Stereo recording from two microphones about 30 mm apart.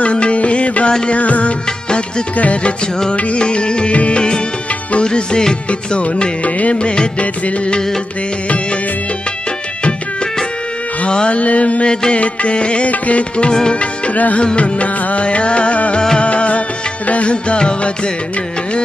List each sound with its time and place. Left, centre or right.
0.0 s music: left
1.9 s music: left
2.3 s music: left
3.3 s music: left
3.9 s music: left
5.0 s music: left
5.7 s music: left
11.1 s music: left
12.9 s music: left
13.4 s music: left
14.1 s music: left
14.4 s music: left